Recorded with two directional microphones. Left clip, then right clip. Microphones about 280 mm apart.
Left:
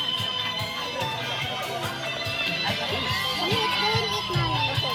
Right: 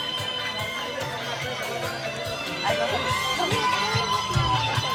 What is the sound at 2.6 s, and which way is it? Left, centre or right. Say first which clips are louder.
Music: right 3 dB; right.